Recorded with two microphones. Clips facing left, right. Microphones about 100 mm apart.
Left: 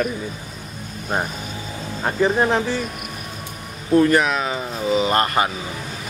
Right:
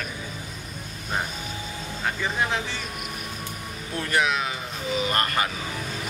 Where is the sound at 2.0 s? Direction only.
40° left (ahead or behind).